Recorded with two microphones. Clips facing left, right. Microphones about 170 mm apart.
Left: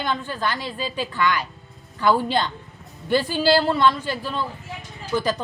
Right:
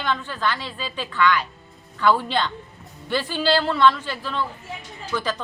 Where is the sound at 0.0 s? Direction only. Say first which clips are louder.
Even; 15° left (ahead or behind).